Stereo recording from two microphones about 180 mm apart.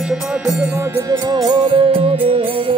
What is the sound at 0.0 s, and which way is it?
Music, 5° right (ahead or behind).